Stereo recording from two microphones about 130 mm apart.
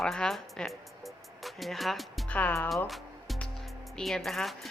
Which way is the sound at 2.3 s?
10° left (ahead or behind).